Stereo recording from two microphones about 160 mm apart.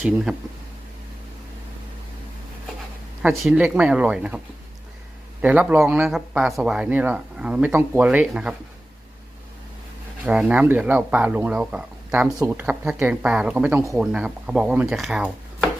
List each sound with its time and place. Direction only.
0.3 s speech: 5° right (ahead or behind)
3.2 s speech: 5° right (ahead or behind)
5.4 s speech: 10° right (ahead or behind)
10.2 s speech: 10° right (ahead or behind)